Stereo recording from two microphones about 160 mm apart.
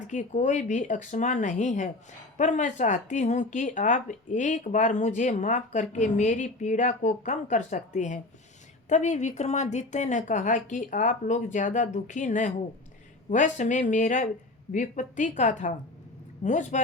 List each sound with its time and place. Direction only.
0.1 s speech: 50° left (ahead or behind)